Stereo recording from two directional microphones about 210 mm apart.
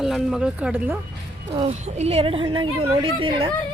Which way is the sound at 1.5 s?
30° right (ahead or behind).